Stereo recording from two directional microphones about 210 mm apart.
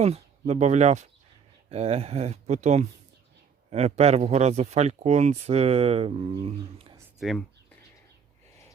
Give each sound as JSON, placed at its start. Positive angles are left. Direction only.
{"t": 0.0, "sound": "speech", "side_deg": -30}
{"t": 7.2, "sound": "speech", "side_deg": 0}